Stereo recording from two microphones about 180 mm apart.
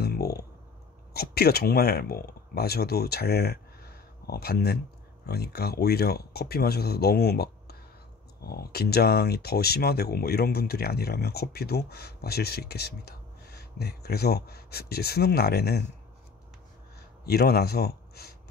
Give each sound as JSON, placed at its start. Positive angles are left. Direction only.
{"t": 0.0, "sound": "clicking", "side_deg": 60}
{"t": 1.1, "sound": "speech", "side_deg": 60}
{"t": 17.3, "sound": "speech", "side_deg": 60}